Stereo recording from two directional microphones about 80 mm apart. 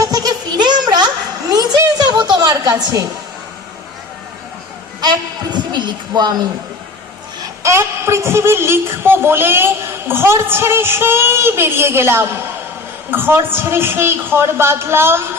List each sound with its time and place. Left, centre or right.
0.0 s a sound: right
4.9 s a woman's voice: right
7.6 s a man's voice: right